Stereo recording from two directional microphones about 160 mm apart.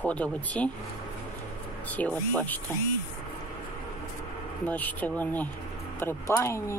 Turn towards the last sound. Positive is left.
turn(degrees=15)  # may be behind; listen again after turning